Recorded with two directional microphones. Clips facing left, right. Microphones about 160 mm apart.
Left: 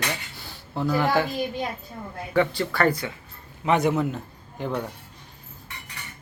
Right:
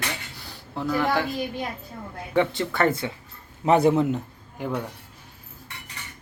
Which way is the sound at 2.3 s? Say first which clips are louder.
Even; 20° right (ahead or behind).